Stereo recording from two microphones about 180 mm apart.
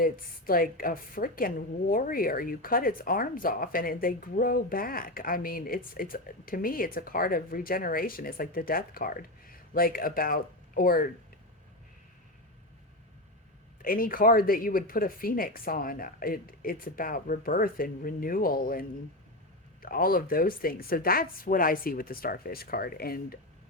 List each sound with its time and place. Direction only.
0.0 s a woman's voice: 55° left (ahead or behind)
13.8 s a woman's voice: 50° left (ahead or behind)